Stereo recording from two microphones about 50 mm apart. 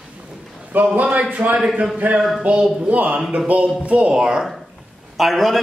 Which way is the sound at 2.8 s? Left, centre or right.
Right.